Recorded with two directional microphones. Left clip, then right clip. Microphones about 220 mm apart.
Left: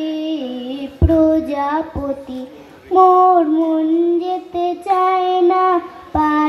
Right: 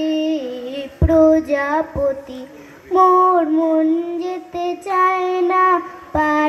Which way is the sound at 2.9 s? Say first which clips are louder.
Left 2 dB; 40° right (ahead or behind).